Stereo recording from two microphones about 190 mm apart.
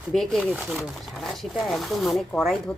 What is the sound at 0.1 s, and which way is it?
Speech, centre (ahead or behind).